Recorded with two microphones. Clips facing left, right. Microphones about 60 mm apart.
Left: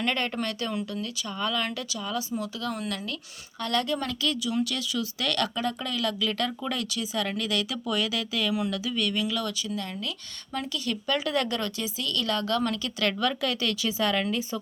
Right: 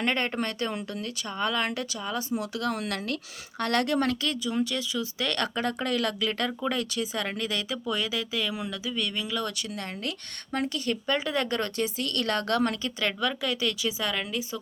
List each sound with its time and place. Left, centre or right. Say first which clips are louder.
0.0 s speech: right 1 dB; right
0.8 s speech: left 2 dB; right
2.0 s speech: left 3 dB; right
2.4 s speech: right 2 dB; right
9.5 s speech: left 2 dB; right
11.0 s speech: left 2 dB; right
11.4 s speech: right 2 dB; right
13.0 s a woman's voice: left 3 dB; centre